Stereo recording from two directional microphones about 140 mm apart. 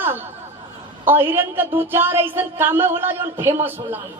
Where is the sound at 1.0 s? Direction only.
15° right (ahead or behind).